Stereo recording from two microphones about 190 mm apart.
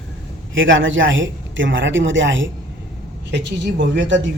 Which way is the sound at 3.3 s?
70° right (ahead or behind).